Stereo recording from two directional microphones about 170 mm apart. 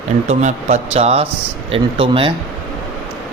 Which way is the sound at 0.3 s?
40° right (ahead or behind).